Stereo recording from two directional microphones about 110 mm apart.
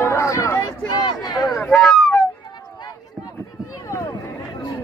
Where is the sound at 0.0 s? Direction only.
25° left (ahead or behind).